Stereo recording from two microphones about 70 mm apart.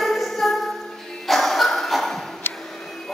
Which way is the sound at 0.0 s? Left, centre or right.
Centre.